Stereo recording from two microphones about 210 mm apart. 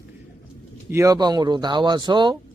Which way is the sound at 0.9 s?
15° right (ahead or behind).